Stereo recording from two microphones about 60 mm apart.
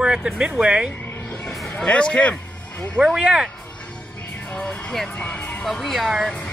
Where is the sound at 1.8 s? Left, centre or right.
Centre.